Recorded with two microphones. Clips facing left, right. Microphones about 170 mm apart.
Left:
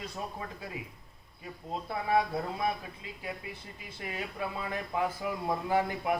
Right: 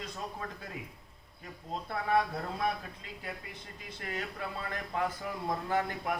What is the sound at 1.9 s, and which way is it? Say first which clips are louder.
Speech: left 1 dB; 10° left (ahead or behind).